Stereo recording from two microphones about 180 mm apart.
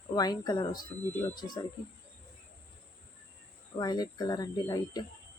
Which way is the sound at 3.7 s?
20° left (ahead or behind).